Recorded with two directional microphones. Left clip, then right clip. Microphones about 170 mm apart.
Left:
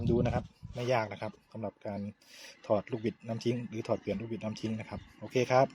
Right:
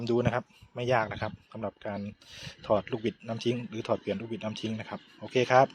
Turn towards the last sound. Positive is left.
turn(degrees=0)  # may be behind; listen again after turning